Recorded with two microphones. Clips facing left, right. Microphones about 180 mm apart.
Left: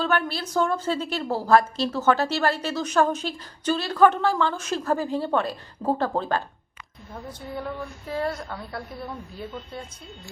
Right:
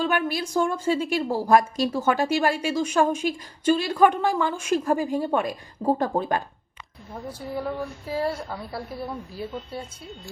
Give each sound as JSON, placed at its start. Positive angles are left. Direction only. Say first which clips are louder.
{"t": 0.0, "sound": "a woman's voice", "louder": "right 1 dB", "side_deg": -10}